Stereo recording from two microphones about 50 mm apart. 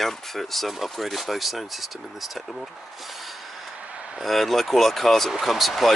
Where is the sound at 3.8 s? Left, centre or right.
Right.